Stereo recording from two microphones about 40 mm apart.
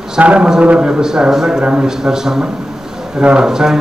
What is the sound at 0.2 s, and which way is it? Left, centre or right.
Speech, right.